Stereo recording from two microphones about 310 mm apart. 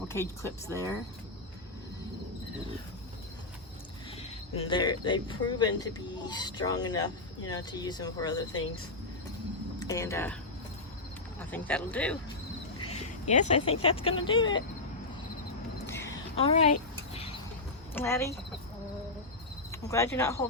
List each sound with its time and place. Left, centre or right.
0.1 s speech: centre
4.2 s speech: centre
9.8 s speech: centre
11.5 s speech: centre
12.9 s speech: left
15.9 s a sound: centre
16.3 s speech: centre
17.9 s speech: centre
19.7 s speech: centre